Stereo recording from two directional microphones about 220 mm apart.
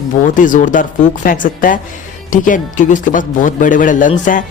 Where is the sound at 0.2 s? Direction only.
35° left (ahead or behind).